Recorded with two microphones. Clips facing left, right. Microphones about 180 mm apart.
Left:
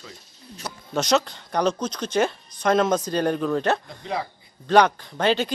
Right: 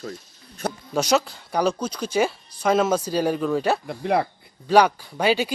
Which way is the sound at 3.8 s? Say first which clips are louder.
Right 7 dB; 65° right (ahead or behind).